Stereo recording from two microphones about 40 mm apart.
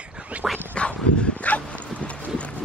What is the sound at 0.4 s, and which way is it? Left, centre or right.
Quack, centre.